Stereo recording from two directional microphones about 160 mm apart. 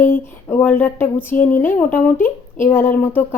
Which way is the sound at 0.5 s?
10° left (ahead or behind).